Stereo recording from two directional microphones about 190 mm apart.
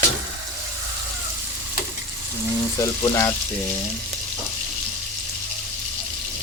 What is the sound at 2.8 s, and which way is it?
Frying, 15° left (ahead or behind).